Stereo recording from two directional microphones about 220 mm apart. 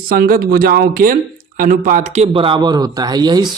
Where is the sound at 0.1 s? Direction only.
40° right (ahead or behind).